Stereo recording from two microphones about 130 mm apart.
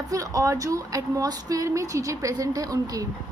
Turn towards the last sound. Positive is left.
turn(degrees=-25)  # may be behind; listen again after turning